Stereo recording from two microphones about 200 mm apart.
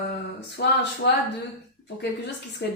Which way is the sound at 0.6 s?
55° left (ahead or behind).